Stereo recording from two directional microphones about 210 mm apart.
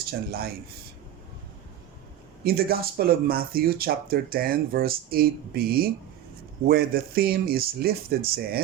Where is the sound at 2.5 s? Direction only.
45° right (ahead or behind).